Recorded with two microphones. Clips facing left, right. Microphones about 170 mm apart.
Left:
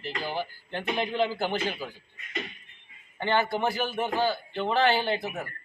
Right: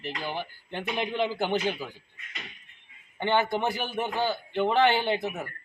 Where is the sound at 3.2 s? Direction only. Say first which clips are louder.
Even; 20° right (ahead or behind).